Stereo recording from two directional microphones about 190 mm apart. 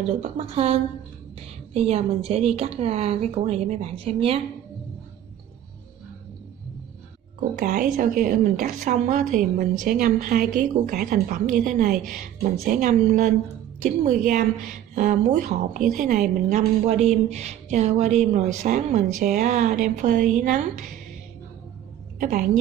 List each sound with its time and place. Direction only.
0.2 s a woman's voice: 30° right (ahead or behind)
7.5 s a woman's voice: 45° right (ahead or behind)
22.2 s speech: 45° right (ahead or behind)